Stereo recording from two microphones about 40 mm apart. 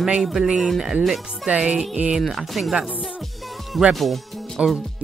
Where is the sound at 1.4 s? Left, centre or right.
Right.